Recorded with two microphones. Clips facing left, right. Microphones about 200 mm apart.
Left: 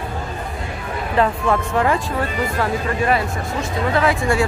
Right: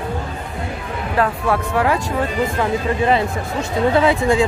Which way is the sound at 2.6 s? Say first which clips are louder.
Right 1 dB; 25° right (ahead or behind).